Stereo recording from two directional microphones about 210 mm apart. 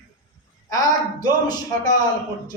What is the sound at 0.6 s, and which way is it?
A man's voice, 15° left (ahead or behind).